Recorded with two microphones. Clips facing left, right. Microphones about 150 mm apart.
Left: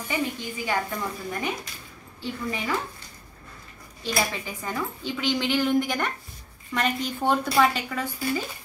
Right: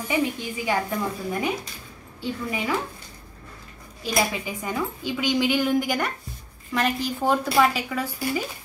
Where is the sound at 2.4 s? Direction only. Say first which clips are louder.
Right 1 dB; 15° right (ahead or behind).